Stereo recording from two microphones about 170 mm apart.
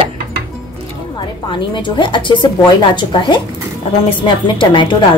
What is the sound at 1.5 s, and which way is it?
A woman's voice, 30° left (ahead or behind).